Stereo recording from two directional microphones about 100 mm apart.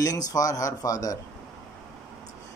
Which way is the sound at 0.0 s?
35° left (ahead or behind).